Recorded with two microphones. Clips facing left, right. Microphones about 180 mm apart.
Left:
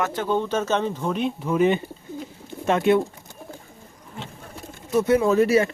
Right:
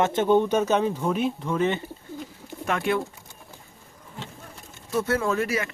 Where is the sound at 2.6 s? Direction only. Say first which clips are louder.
Left 6 dB; 25° left (ahead or behind).